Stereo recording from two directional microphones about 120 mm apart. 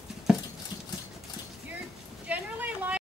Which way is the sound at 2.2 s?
10° right (ahead or behind).